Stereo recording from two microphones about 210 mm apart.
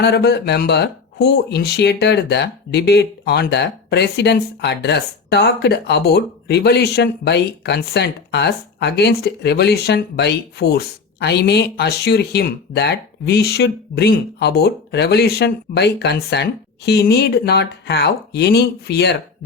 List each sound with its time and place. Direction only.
0.0 s speech: 50° left (ahead or behind)